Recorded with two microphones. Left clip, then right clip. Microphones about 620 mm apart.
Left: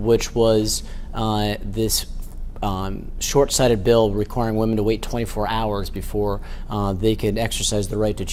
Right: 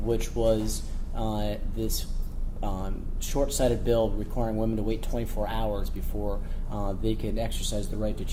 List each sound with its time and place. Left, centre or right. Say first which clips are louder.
0.1 s speech: left 9 dB; left